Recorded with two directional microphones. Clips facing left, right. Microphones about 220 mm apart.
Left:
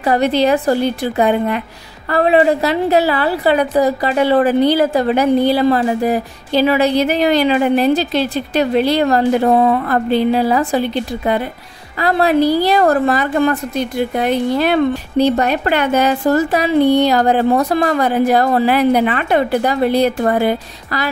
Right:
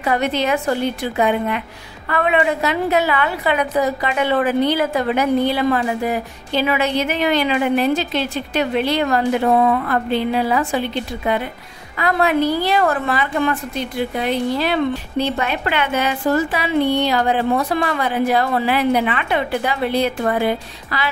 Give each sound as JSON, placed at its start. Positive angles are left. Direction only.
{"t": 0.0, "sound": "a woman's voice", "side_deg": 35}
{"t": 15.1, "sound": "a woman's voice", "side_deg": 40}